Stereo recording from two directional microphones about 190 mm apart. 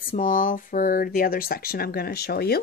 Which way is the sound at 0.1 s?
45° left (ahead or behind).